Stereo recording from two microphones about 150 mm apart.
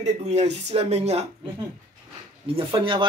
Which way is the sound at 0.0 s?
45° right (ahead or behind).